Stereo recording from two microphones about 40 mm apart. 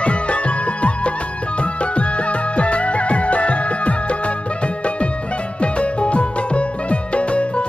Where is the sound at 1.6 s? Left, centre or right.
Left.